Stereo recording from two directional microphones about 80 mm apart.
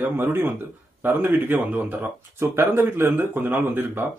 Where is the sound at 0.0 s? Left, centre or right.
Right.